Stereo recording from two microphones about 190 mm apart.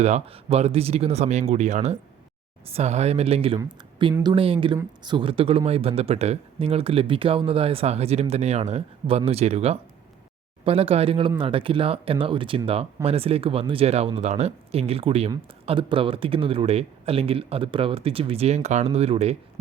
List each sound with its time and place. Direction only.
0.0 s speech: 35° right (ahead or behind)